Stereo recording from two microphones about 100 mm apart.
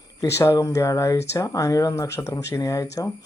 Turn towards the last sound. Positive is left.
turn(degrees=35)  # may be behind; listen again after turning